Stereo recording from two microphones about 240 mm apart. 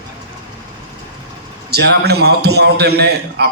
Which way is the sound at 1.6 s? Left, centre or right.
Right.